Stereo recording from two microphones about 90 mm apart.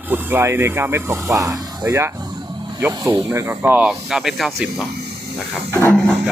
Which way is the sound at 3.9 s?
5° right (ahead or behind).